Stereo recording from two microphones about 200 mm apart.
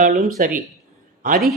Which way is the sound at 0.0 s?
40° right (ahead or behind).